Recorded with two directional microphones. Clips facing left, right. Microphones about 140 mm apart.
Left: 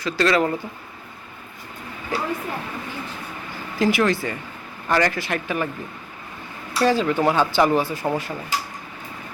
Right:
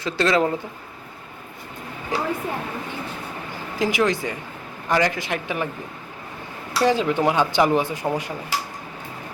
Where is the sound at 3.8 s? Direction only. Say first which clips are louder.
Left 2 dB; 15° right (ahead or behind).